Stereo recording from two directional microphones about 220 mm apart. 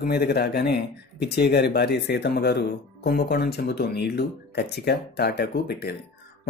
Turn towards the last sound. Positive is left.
turn(degrees=45)  # may be behind; listen again after turning